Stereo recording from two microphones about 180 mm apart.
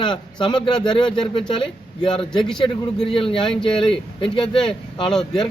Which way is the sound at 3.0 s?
30° left (ahead or behind).